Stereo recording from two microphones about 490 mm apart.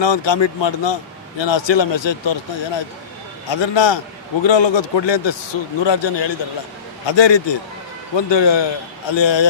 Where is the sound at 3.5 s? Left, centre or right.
Left.